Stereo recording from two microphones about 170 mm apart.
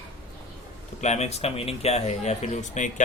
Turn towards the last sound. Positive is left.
turn(degrees=45)  # may be behind; listen again after turning